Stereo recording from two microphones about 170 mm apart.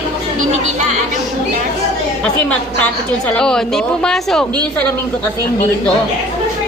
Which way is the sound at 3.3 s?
5° left (ahead or behind).